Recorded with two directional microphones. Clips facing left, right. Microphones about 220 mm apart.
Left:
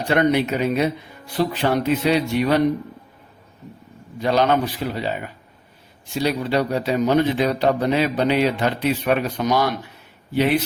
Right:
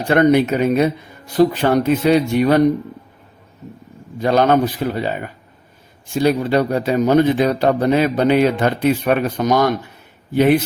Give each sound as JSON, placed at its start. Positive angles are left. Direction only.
{"t": 0.1, "sound": "a man's voice", "side_deg": -50}
{"t": 4.2, "sound": "a man's voice", "side_deg": -50}